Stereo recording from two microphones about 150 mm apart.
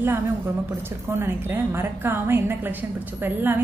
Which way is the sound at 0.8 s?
15° right (ahead or behind).